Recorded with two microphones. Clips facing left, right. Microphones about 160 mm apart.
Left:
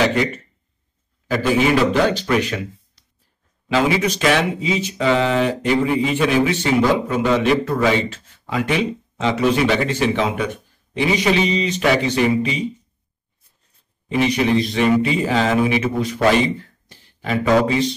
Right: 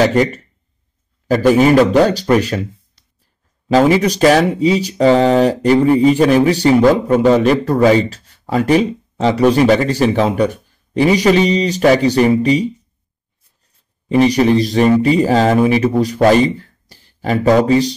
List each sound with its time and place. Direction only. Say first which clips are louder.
0.0 s speech: right 5 dB; 40° right (ahead or behind)
1.5 s speech: right 6 dB; 45° right (ahead or behind)
3.6 s speech: right 7 dB; 40° right (ahead or behind)
14.0 s speech: right 7 dB; 40° right (ahead or behind)